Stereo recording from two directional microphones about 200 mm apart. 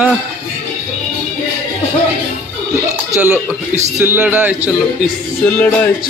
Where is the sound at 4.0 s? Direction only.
10° right (ahead or behind).